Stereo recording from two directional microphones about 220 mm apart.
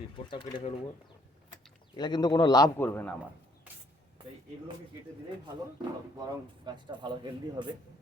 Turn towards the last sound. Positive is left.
turn(degrees=-20)  # may be behind; listen again after turning